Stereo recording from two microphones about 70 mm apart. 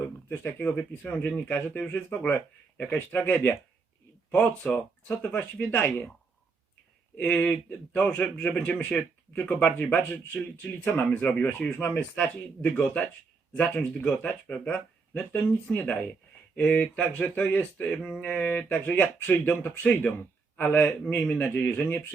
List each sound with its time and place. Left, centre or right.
0.3 s speech: left
0.8 s speech: left
7.2 s speech: centre
9.0 s speech: left
9.5 s speech: centre